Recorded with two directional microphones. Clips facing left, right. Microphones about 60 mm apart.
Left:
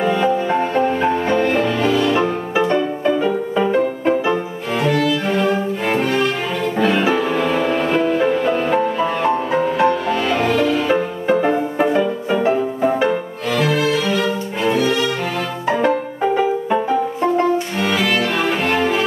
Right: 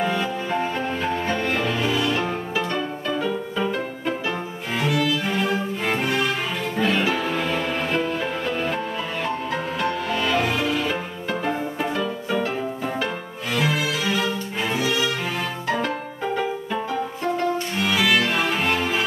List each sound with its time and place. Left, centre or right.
0.0 s music: centre
2.5 s music: left
4.7 s violin: centre
6.8 s music: centre
10.0 s music: centre
10.5 s music: centre
10.9 s music: left
13.5 s violin: centre
15.7 s music: left
17.9 s violin: centre